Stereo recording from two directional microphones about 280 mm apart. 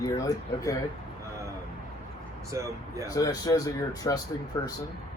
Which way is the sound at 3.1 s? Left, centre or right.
Centre.